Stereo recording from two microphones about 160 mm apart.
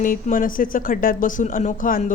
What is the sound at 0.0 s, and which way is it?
Speech, 55° left (ahead or behind).